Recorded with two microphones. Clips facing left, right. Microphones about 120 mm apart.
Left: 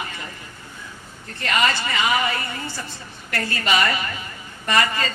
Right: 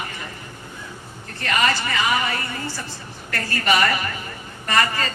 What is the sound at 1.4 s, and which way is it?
Speech, 20° left (ahead or behind).